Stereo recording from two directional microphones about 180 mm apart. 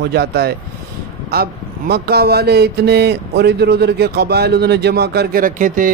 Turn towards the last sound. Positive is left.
turn(degrees=-50)  # may be behind; listen again after turning